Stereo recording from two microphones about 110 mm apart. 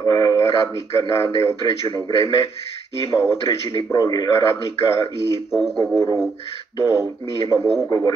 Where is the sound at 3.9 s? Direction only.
40° left (ahead or behind).